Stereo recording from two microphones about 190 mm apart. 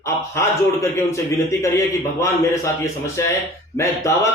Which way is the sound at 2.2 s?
15° left (ahead or behind).